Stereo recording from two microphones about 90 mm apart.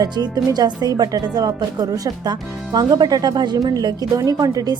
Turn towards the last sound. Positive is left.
turn(degrees=-45)  # may be behind; listen again after turning